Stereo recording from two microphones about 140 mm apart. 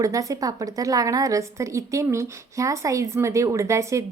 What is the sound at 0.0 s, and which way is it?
A woman's voice, 25° right (ahead or behind).